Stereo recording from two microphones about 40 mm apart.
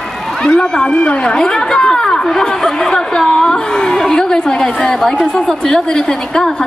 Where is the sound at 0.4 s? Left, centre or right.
Left.